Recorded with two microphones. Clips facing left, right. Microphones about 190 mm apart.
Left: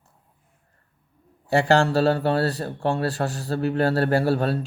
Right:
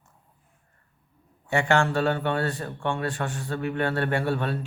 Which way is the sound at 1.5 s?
35° left (ahead or behind).